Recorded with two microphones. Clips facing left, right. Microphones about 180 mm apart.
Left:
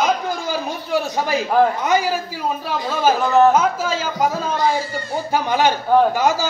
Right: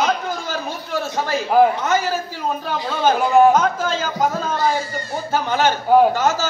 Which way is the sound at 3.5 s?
5° left (ahead or behind).